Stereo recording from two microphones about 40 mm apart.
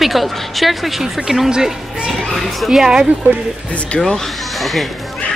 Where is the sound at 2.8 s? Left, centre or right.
Centre.